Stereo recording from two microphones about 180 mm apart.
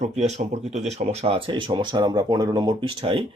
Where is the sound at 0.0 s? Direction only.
40° right (ahead or behind).